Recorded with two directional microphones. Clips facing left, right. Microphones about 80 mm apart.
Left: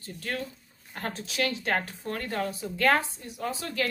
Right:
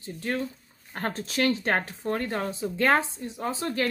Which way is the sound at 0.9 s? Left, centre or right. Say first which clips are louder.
Right 4 dB; right.